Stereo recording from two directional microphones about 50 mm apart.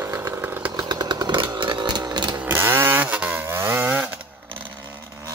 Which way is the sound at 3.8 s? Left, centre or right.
Right.